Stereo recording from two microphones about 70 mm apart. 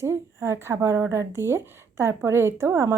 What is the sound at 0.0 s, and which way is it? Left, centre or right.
A woman's voice, right.